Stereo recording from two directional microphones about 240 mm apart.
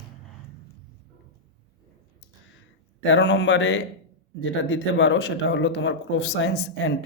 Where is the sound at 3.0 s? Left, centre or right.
Left.